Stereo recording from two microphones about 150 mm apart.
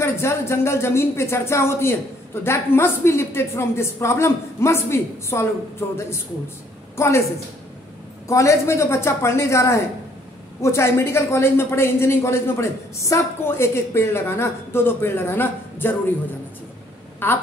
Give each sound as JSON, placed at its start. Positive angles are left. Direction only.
{"t": 0.0, "sound": "a woman's voice", "side_deg": 20}
{"t": 8.3, "sound": "a woman's voice", "side_deg": 20}
{"t": 17.2, "sound": "a woman's voice", "side_deg": 15}